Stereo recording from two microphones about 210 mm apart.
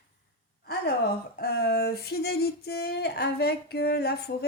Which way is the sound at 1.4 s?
50° left (ahead or behind).